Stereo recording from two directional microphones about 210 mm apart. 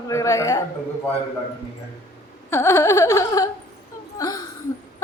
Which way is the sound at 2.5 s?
15° left (ahead or behind).